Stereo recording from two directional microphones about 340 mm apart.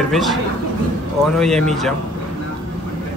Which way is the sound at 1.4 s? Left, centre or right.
Centre.